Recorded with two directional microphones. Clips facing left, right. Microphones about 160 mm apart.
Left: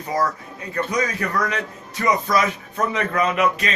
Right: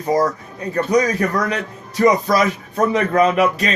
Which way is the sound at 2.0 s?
35° right (ahead or behind).